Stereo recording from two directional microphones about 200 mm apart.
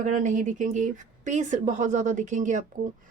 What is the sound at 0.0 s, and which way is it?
Speech, 40° right (ahead or behind).